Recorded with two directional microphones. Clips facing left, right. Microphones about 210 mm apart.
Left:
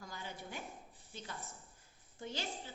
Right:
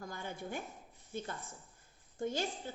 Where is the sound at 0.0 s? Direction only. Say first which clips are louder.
Right 5 dB; 50° right (ahead or behind).